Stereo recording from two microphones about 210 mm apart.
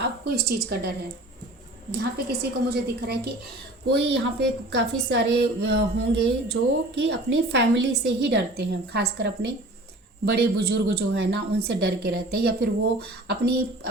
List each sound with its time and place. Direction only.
0.0 s a woman's voice: 45° right (ahead or behind)
2.0 s a woman's voice: 50° right (ahead or behind)
10.2 s a woman's voice: 50° right (ahead or behind)